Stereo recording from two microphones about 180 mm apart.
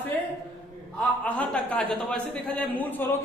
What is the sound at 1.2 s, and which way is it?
A woman's voice, 5° left (ahead or behind).